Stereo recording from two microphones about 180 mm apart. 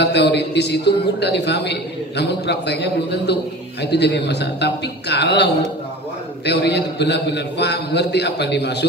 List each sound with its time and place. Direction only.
0.0 s a man's voice: 70° left (ahead or behind)